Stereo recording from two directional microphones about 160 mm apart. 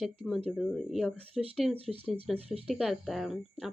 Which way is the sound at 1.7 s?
35° right (ahead or behind).